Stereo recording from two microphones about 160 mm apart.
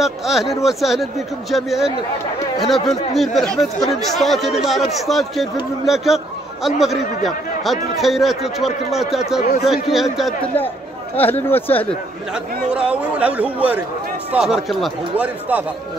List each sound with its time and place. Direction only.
0.0 s speech: centre (ahead or behind)
11.1 s speech: 10° left (ahead or behind)
12.7 s speech: 10° right (ahead or behind)